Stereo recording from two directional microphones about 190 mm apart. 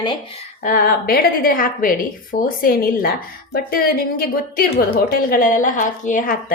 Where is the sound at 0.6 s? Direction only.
45° left (ahead or behind).